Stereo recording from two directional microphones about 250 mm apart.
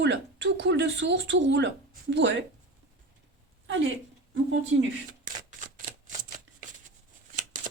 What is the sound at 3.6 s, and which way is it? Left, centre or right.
Speech, right.